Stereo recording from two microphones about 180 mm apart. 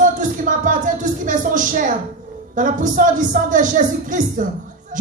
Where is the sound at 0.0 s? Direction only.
45° right (ahead or behind).